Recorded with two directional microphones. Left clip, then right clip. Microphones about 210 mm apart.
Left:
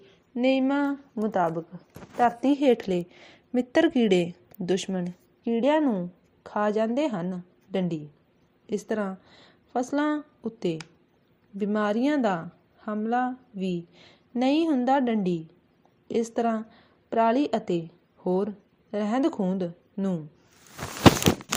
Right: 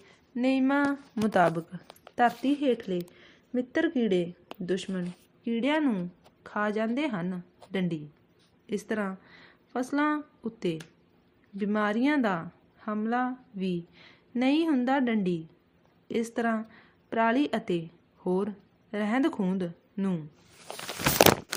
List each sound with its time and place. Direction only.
0.3 s a woman's voice: centre (ahead or behind)
1.1 s speech: 20° right (ahead or behind)
2.6 s speech: 35° left (ahead or behind)
5.5 s a woman's voice: 10° left (ahead or behind)